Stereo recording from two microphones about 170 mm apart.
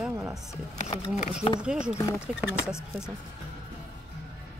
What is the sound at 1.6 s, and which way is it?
Speech, 5° right (ahead or behind).